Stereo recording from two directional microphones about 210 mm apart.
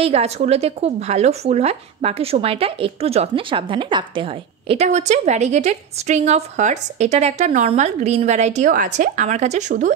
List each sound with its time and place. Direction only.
0.0 s speech: 30° right (ahead or behind)